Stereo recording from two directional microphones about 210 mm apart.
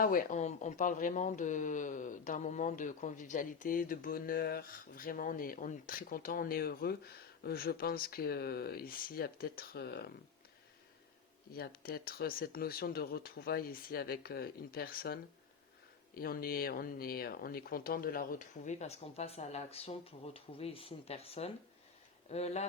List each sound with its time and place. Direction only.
0.0 s speech: 40° left (ahead or behind)
11.5 s speech: 45° left (ahead or behind)